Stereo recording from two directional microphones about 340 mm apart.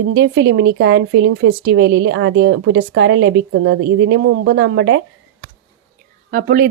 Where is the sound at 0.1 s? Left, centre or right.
Right.